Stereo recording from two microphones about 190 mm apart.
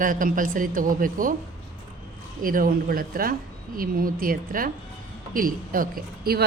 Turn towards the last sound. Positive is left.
turn(degrees=-50)  # may be behind; listen again after turning